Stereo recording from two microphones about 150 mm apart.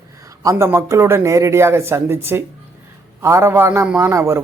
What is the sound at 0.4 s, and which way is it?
A man's voice, 20° right (ahead or behind).